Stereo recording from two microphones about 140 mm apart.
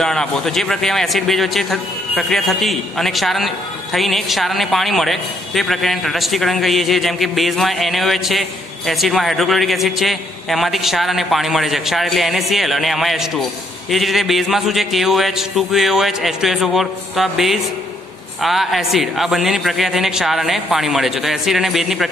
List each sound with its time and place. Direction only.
0.0 s a man's voice: 5° left (ahead or behind)